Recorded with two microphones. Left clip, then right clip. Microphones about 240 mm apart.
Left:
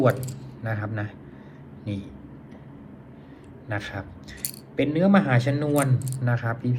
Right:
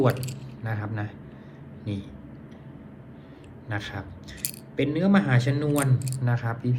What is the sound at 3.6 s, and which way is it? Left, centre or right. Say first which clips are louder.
A man's voice: left 2 dB; centre.